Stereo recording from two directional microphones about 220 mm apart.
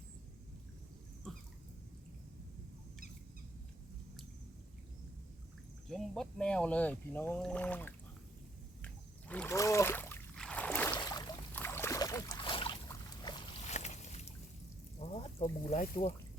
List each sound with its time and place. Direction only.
5.9 s speech: 5° left (ahead or behind)
8.8 s rowboat: 5° left (ahead or behind)
11.0 s boat: 15° left (ahead or behind)
13.7 s boat: 30° left (ahead or behind)
15.0 s speech: 25° left (ahead or behind)